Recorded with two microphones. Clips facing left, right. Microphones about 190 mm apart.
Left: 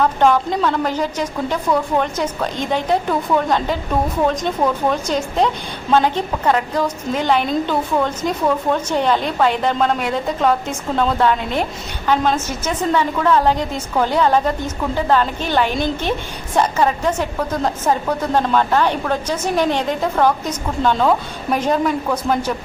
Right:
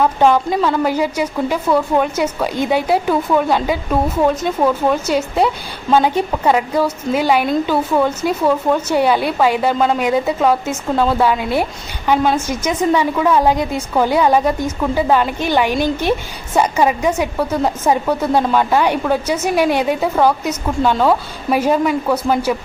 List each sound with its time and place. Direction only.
0.0 s speech: 10° right (ahead or behind)